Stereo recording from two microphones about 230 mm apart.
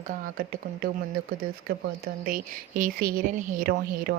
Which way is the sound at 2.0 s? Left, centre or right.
Right.